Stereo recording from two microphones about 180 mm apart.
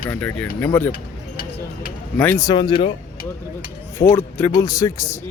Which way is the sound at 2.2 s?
15° left (ahead or behind).